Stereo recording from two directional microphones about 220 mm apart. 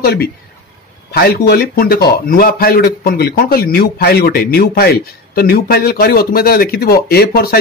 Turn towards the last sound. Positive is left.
turn(degrees=45)  # may be behind; listen again after turning